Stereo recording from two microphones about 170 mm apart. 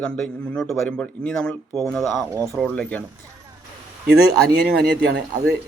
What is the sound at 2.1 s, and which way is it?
Speech, 15° right (ahead or behind).